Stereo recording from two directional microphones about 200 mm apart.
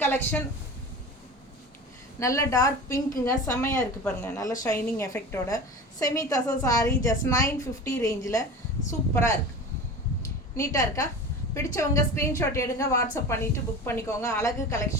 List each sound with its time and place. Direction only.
0.0 s speech: 10° left (ahead or behind)
2.1 s a woman's voice: 15° left (ahead or behind)
10.6 s a woman's voice: 15° left (ahead or behind)